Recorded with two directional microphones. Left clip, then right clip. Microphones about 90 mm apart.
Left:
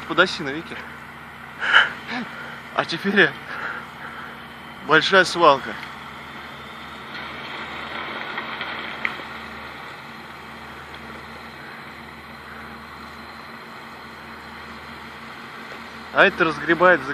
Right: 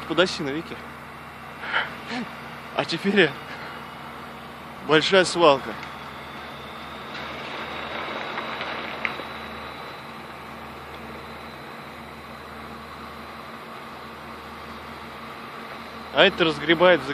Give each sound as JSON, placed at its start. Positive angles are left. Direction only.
{"t": 0.1, "sound": "speech", "side_deg": 10}
{"t": 1.6, "sound": "gasp", "side_deg": 20}
{"t": 2.7, "sound": "speech", "side_deg": 5}
{"t": 4.8, "sound": "speech", "side_deg": 5}
{"t": 16.1, "sound": "speech", "side_deg": 10}